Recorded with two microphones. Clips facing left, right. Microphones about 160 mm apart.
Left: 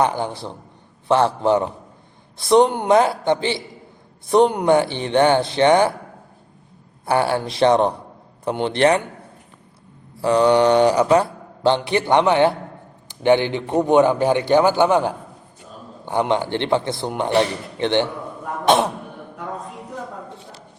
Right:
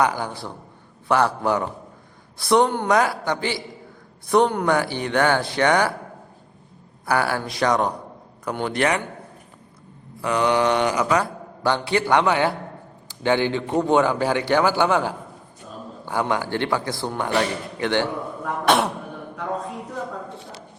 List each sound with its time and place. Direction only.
0.0 s speech: 25° left (ahead or behind)
7.0 s speech: 25° left (ahead or behind)
10.2 s a man's voice: 30° left (ahead or behind)